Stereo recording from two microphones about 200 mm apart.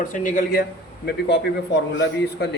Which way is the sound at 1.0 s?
60° left (ahead or behind).